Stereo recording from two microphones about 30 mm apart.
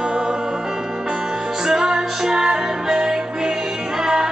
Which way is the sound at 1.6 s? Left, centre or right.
Centre.